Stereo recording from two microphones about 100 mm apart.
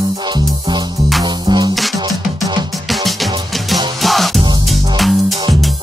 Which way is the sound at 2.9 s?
Centre (ahead or behind).